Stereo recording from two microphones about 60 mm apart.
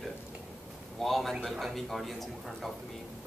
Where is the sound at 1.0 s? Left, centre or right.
Centre.